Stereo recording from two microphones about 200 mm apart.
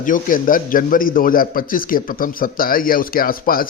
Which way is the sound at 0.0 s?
40° left (ahead or behind).